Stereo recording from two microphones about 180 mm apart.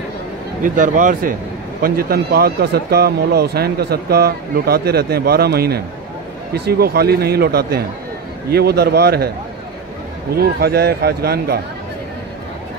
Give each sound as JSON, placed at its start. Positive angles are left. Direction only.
{"t": 0.6, "sound": "speech", "side_deg": -45}
{"t": 1.8, "sound": "speech", "side_deg": -55}
{"t": 10.3, "sound": "speech", "side_deg": -60}